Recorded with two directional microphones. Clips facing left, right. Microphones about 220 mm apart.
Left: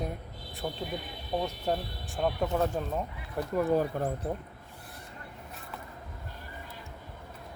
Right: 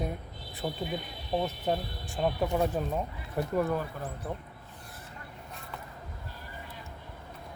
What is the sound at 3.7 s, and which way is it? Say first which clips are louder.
Speech: left 6 dB; 40° left (ahead or behind).